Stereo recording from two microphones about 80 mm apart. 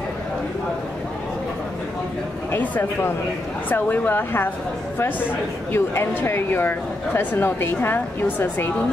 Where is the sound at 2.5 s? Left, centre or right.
Left.